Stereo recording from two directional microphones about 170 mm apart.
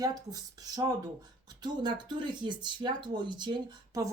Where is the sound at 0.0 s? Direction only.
20° right (ahead or behind).